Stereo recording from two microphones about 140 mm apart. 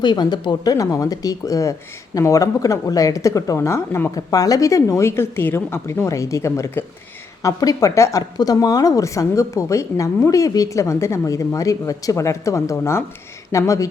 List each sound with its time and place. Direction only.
0.0 s a woman's voice: 30° left (ahead or behind)